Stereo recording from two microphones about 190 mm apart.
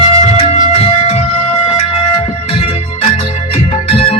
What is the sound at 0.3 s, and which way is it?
Music, 35° left (ahead or behind).